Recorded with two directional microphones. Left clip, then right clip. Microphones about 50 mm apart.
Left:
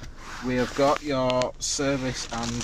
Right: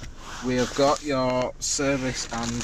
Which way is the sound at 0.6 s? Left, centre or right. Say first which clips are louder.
Right 1 dB; right.